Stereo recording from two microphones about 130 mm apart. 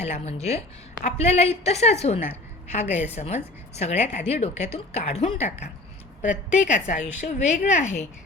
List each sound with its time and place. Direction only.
0.0 s a woman's voice: 55° left (ahead or behind)
6.2 s a woman's voice: 10° right (ahead or behind)
6.7 s a woman's voice: 65° left (ahead or behind)